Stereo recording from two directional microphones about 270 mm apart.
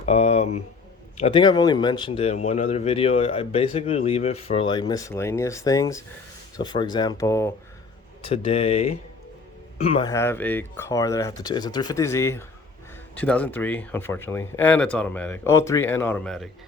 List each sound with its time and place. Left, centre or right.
0.0 s a man's voice: left; by 16.5 s centre